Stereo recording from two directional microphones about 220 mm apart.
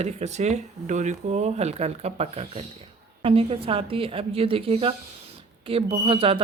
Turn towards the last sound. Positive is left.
turn(degrees=-25)  # may be behind; listen again after turning